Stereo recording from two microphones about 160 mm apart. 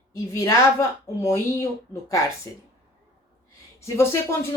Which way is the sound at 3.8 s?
15° left (ahead or behind).